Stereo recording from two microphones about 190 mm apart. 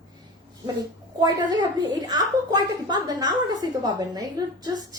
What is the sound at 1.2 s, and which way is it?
A woman's voice, 20° right (ahead or behind).